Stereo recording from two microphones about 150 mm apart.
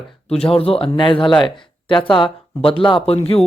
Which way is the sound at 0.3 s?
40° left (ahead or behind).